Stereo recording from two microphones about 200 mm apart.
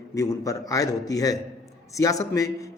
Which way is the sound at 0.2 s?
15° left (ahead or behind).